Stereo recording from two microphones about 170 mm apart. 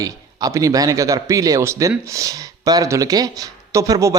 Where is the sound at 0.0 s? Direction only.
20° right (ahead or behind).